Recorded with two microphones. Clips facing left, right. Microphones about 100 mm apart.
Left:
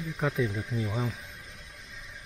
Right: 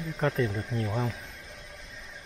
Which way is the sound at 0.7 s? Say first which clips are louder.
Right 1 dB; 65° right (ahead or behind).